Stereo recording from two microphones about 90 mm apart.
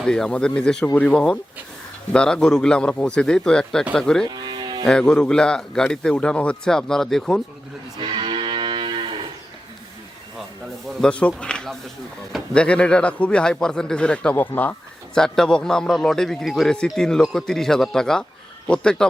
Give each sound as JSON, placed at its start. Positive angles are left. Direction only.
{"t": 0.0, "sound": "a man's voice", "side_deg": 5}
{"t": 4.3, "sound": "livestock", "side_deg": -50}
{"t": 4.9, "sound": "a man's voice", "side_deg": 10}
{"t": 7.9, "sound": "moo", "side_deg": -65}
{"t": 11.0, "sound": "a man's voice", "side_deg": 10}
{"t": 15.1, "sound": "a man's voice", "side_deg": 5}